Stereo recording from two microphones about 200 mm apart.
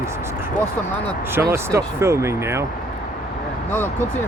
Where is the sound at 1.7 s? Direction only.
15° right (ahead or behind).